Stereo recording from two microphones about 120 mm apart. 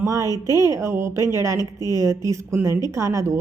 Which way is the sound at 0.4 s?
25° right (ahead or behind).